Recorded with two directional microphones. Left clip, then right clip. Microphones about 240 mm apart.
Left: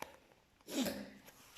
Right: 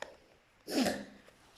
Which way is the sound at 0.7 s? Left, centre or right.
Centre.